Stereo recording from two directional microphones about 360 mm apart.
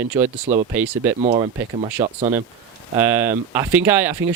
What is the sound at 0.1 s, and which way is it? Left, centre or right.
Speech, centre.